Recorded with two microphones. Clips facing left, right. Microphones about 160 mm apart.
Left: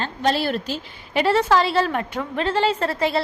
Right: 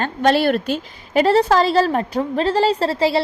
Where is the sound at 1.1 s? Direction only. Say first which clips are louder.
Right 4 dB; 40° right (ahead or behind).